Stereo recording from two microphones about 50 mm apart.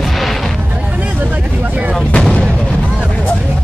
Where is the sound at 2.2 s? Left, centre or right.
Centre.